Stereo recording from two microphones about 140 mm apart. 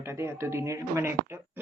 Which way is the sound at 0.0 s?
20° right (ahead or behind).